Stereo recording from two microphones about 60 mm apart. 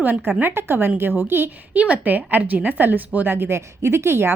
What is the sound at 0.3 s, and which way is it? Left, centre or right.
A woman's voice, right.